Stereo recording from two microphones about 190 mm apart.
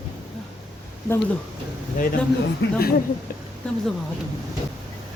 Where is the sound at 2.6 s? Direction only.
65° left (ahead or behind).